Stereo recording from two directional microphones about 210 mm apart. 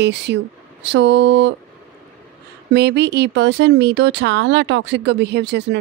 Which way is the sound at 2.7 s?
50° right (ahead or behind).